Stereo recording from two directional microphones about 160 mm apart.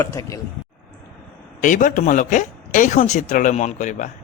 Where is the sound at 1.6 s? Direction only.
55° left (ahead or behind).